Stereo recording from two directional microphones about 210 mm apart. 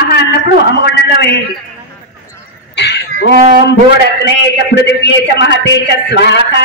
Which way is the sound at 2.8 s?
55° left (ahead or behind).